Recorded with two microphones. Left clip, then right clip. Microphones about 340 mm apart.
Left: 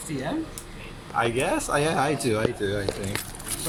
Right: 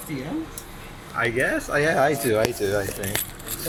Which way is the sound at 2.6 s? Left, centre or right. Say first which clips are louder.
Right 4 dB; right.